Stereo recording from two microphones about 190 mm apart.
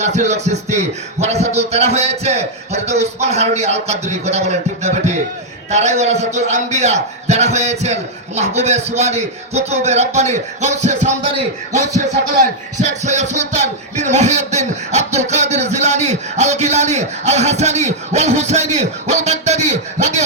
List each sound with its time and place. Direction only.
0.0 s music: 35° right (ahead or behind)
13.0 s music: 35° right (ahead or behind)